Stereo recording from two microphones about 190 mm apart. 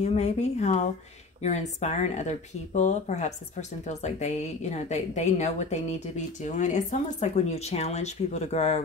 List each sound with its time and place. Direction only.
0.0 s a woman's voice: 35° left (ahead or behind)